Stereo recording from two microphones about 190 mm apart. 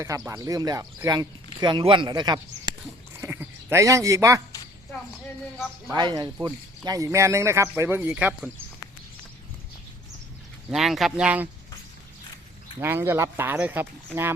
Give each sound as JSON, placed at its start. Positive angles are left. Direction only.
{"t": 0.0, "sound": "speech", "side_deg": -15}
{"t": 3.2, "sound": "sheep", "side_deg": -15}
{"t": 5.9, "sound": "speech", "side_deg": -25}
{"t": 10.7, "sound": "speech", "side_deg": 0}
{"t": 12.8, "sound": "speech", "side_deg": -15}